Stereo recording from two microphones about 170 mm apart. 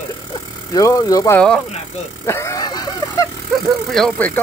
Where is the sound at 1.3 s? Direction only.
5° left (ahead or behind).